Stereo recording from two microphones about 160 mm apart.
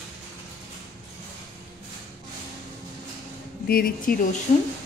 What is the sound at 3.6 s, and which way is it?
Speech, 70° left (ahead or behind).